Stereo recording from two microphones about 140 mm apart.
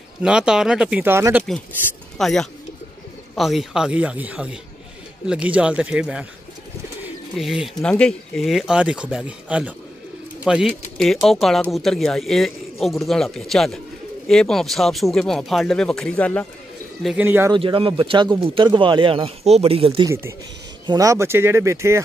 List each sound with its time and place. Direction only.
0.2 s speech: 5° right (ahead or behind)
2.1 s speech: 5° left (ahead or behind)
7.3 s speech: centre (ahead or behind)
17.2 s speech: 15° right (ahead or behind)
17.5 s speech: 35° right (ahead or behind)
20.8 s speech: 30° right (ahead or behind)